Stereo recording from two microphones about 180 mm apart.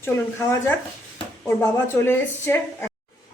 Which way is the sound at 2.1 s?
10° left (ahead or behind).